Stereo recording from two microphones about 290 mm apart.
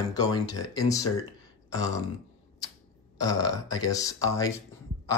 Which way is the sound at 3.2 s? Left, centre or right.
Centre.